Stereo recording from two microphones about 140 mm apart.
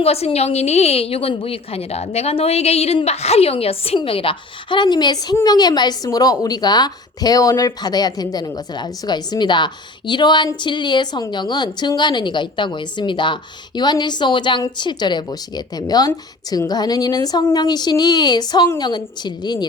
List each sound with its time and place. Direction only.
0.0 s a woman's voice: 45° left (ahead or behind)